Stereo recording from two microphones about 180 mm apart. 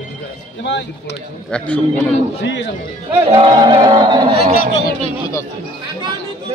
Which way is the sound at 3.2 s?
30° right (ahead or behind).